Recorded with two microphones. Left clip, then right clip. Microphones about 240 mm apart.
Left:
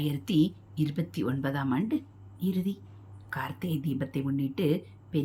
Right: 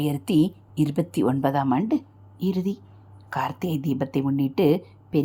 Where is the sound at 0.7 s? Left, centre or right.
Centre.